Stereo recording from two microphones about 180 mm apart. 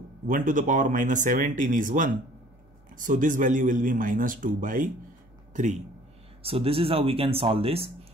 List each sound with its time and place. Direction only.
0.3 s speech: 45° right (ahead or behind)
6.4 s speech: 30° right (ahead or behind)